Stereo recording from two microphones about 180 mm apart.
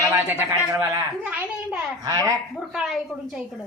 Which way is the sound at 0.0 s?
10° right (ahead or behind).